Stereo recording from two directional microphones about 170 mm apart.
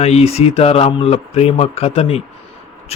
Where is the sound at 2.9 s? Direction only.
40° left (ahead or behind).